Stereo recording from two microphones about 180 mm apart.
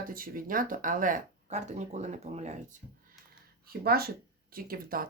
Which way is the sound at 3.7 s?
55° right (ahead or behind).